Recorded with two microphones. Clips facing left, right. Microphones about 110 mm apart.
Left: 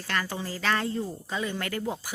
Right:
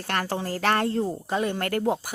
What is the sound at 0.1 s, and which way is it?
Speech, 60° right (ahead or behind).